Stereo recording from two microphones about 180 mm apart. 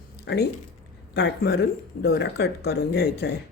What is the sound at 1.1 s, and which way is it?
Speech, 65° left (ahead or behind).